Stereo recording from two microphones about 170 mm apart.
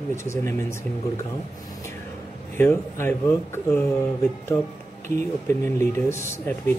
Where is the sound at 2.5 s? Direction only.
15° left (ahead or behind).